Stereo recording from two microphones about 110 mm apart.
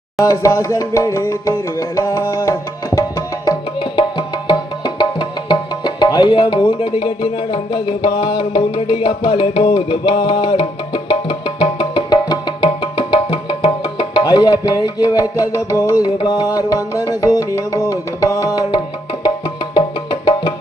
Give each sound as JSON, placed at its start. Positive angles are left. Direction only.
{"t": 0.2, "sound": "speech", "side_deg": 30}
{"t": 2.0, "sound": "music", "side_deg": 30}
{"t": 4.4, "sound": "music", "side_deg": 40}
{"t": 18.3, "sound": "tabla", "side_deg": 30}